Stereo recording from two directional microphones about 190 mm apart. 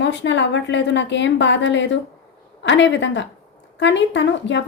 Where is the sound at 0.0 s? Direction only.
70° left (ahead or behind).